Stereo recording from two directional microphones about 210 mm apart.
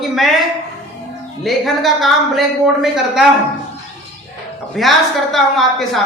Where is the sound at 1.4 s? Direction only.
Centre (ahead or behind).